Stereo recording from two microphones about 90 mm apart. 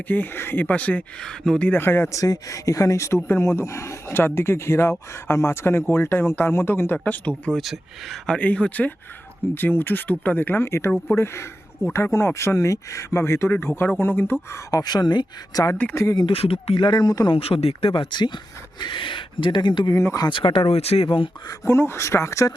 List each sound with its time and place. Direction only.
0.1 s speech: 25° left (ahead or behind)
2.1 s speech: 40° left (ahead or behind)
3.2 s speech: 25° left (ahead or behind)
7.6 s speech: centre (ahead or behind)
8.4 s speech: 15° left (ahead or behind)
14.5 s speech: 40° left (ahead or behind)
15.7 s speech: 25° left (ahead or behind)
16.1 s speech: 75° left (ahead or behind); by 17.3 s 50° left (ahead or behind)
17.3 s speech: 90° left; by 18.3 s 55° left (ahead or behind)
18.8 s speech: 70° left (ahead or behind)
19.9 s speech: 30° left (ahead or behind)
20.3 s speech: 75° left (ahead or behind)
21.6 s speech: 25° left (ahead or behind)